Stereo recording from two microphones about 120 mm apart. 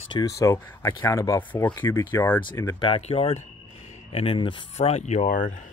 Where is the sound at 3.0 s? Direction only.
60° left (ahead or behind).